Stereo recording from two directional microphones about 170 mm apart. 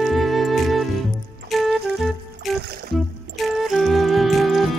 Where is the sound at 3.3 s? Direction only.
Centre (ahead or behind).